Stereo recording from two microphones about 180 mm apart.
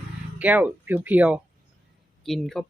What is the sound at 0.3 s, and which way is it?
Speech, 10° right (ahead or behind).